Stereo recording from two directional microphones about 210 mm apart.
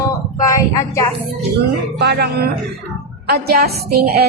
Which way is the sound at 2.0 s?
50° right (ahead or behind).